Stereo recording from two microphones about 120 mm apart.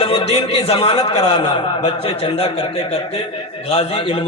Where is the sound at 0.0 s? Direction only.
55° left (ahead or behind).